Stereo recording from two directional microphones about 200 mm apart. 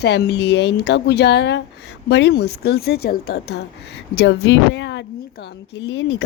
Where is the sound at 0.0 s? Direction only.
60° left (ahead or behind).